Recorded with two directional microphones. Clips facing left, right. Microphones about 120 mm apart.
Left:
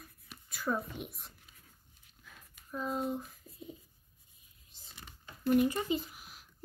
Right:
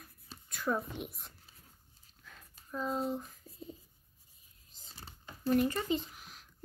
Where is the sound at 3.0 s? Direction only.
Centre (ahead or behind).